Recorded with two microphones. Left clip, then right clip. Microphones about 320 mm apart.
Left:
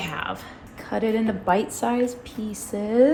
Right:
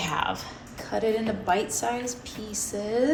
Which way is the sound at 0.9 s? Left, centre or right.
Centre.